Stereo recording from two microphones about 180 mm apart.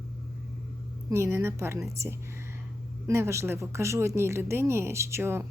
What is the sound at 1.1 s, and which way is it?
Speech, 15° right (ahead or behind).